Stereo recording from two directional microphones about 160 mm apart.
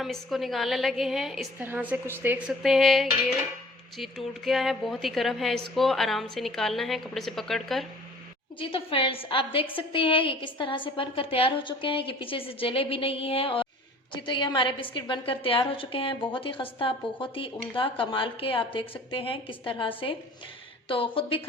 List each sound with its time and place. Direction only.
0.0 s a woman's voice: centre (ahead or behind)
2.5 s a woman's voice: centre (ahead or behind)
8.5 s a woman's voice: 35° left (ahead or behind)